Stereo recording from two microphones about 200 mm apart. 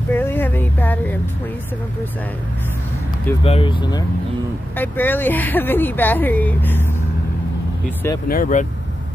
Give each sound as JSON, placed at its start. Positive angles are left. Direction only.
{"t": 0.1, "sound": "a sound", "side_deg": 10}
{"t": 3.4, "sound": "speech", "side_deg": 25}
{"t": 4.7, "sound": "speech", "side_deg": 10}
{"t": 8.3, "sound": "speech", "side_deg": 40}